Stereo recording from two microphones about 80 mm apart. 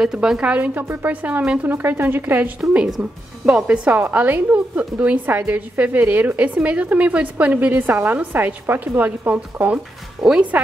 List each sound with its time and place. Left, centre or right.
0.0 s a woman's voice: centre
10.2 s speech: centre